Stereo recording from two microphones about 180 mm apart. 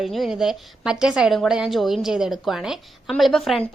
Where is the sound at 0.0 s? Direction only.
Centre (ahead or behind).